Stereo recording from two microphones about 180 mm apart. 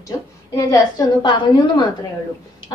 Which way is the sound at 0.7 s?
20° left (ahead or behind).